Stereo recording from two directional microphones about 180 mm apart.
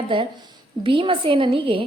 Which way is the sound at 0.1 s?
25° right (ahead or behind).